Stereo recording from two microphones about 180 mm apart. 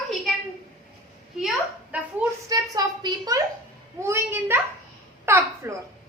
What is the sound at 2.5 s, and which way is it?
A woman's voice, 20° right (ahead or behind).